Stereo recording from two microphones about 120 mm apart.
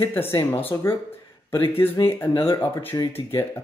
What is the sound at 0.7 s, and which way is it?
Speech, 30° left (ahead or behind).